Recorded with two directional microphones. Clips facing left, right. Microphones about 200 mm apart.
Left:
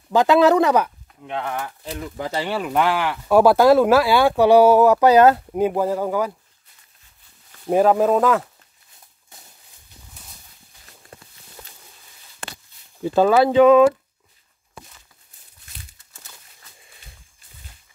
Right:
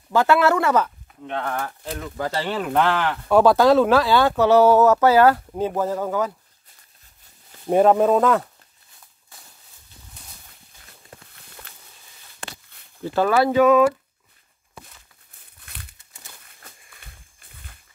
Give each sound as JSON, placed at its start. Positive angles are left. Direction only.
{"t": 0.1, "sound": "speech", "side_deg": 15}
{"t": 7.6, "sound": "speech", "side_deg": 0}
{"t": 13.0, "sound": "speech", "side_deg": 15}
{"t": 15.6, "sound": "crumpling", "side_deg": -60}
{"t": 16.6, "sound": "a sound", "side_deg": -55}